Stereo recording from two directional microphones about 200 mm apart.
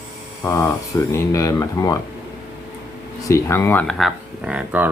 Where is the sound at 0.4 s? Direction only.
15° left (ahead or behind).